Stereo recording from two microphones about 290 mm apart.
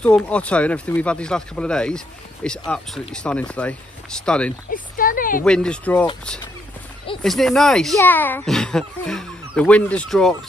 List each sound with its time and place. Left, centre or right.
0.0 s speech: centre
4.6 s speech: left
5.4 s speech: centre
7.2 s speech: centre